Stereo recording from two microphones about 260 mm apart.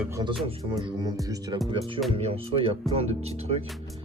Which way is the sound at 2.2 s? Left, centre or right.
Right.